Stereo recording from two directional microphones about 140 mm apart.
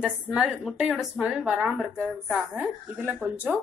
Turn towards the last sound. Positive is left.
turn(degrees=-15)  # may be behind; listen again after turning